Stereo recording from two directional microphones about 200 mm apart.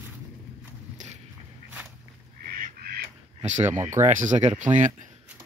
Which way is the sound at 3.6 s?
10° right (ahead or behind).